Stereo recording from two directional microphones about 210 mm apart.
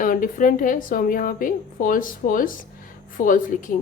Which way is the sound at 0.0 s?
40° left (ahead or behind).